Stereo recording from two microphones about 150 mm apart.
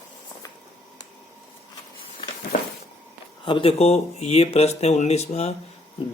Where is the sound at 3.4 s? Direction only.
35° left (ahead or behind).